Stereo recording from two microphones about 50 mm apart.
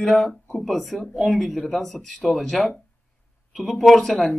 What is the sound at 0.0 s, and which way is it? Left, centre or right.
Speech, centre.